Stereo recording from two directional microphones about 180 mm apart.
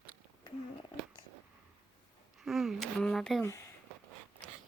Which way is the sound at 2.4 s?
Centre (ahead or behind).